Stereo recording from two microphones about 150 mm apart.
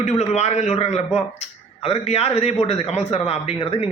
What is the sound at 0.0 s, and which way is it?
A man's voice, 50° left (ahead or behind).